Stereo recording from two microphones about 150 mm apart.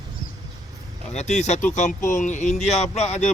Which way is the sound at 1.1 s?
50° left (ahead or behind).